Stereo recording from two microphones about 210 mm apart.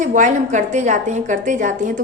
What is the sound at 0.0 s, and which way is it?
A woman's voice, 35° right (ahead or behind).